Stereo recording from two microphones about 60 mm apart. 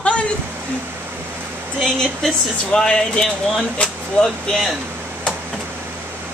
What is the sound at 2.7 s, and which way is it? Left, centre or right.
Speech, centre.